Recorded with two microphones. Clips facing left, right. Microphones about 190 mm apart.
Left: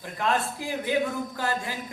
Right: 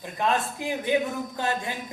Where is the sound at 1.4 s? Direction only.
20° right (ahead or behind).